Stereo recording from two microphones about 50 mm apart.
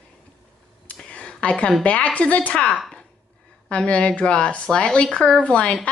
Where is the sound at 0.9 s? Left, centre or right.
Centre.